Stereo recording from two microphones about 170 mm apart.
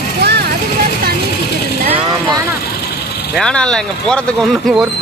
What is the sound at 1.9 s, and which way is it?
Vehicle, 25° right (ahead or behind).